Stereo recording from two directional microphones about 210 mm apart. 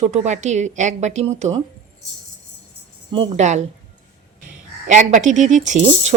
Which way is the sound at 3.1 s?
30° right (ahead or behind).